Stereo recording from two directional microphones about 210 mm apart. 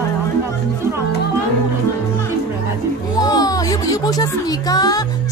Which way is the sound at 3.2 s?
15° left (ahead or behind).